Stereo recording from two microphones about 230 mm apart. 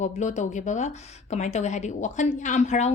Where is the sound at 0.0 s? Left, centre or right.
Left.